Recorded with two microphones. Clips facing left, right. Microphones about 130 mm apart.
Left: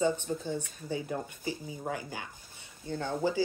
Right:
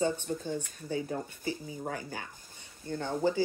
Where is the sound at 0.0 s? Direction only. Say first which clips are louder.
Left 1 dB; 15° left (ahead or behind).